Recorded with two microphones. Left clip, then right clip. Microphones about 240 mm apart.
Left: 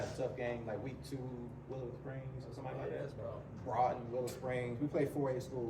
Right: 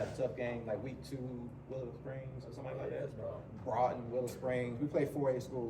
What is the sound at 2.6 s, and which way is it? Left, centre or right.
Speech, centre.